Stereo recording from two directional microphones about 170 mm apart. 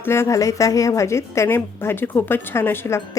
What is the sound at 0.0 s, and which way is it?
A woman's voice, 15° left (ahead or behind).